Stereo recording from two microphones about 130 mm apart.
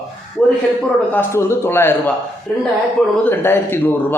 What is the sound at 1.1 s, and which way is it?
Speech, 20° left (ahead or behind).